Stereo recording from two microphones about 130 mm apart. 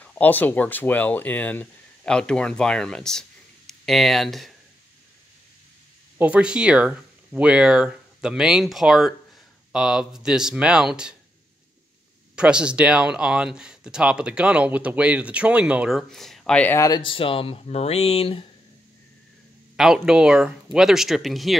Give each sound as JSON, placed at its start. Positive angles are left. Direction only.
{"t": 0.0, "sound": "speech", "side_deg": 15}
{"t": 6.1, "sound": "speech", "side_deg": -10}
{"t": 12.4, "sound": "speech", "side_deg": -5}
{"t": 16.7, "sound": "speech", "side_deg": 25}
{"t": 17.0, "sound": "speech", "side_deg": 40}
{"t": 19.8, "sound": "speech", "side_deg": -5}